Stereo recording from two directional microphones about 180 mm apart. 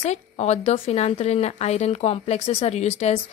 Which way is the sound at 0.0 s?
40° left (ahead or behind).